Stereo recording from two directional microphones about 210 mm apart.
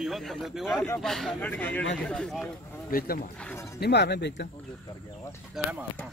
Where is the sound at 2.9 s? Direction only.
45° left (ahead or behind).